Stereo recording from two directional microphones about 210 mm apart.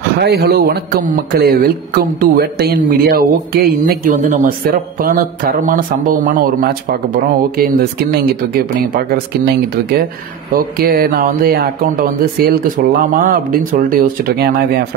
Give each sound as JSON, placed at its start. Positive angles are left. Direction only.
{"t": 0.2, "sound": "a man's voice", "side_deg": -50}